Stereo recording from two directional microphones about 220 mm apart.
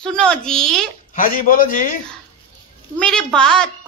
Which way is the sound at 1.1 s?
40° left (ahead or behind).